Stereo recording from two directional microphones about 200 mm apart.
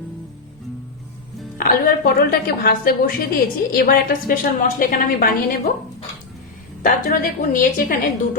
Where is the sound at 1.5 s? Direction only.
45° left (ahead or behind).